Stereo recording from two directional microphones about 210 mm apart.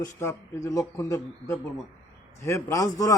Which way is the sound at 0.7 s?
15° left (ahead or behind).